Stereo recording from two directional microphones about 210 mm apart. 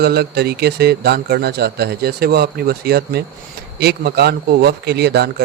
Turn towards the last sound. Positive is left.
turn(degrees=-55)  # may be behind; listen again after turning